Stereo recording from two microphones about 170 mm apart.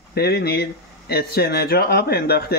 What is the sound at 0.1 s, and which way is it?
Speech, 70° left (ahead or behind).